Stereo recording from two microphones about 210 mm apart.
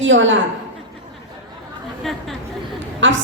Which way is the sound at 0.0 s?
65° right (ahead or behind).